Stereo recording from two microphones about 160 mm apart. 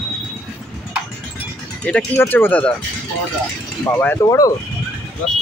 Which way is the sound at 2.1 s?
15° left (ahead or behind).